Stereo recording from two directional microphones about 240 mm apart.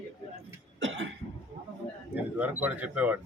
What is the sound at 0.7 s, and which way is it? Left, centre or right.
Cough, right.